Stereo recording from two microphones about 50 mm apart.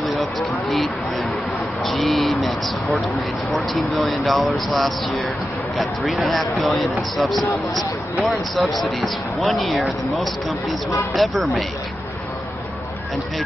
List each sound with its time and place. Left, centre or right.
0.0 s speech: centre